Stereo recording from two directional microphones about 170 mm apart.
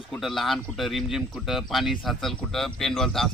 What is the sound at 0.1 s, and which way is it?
Speech, centre (ahead or behind).